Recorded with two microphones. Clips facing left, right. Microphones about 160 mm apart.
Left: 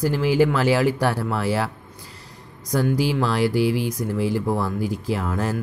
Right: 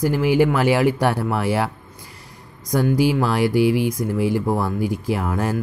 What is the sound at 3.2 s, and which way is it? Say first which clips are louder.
Speech: right 2 dB; 15° right (ahead or behind).